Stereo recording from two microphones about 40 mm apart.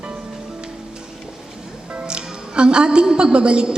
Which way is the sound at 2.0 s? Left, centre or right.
Right.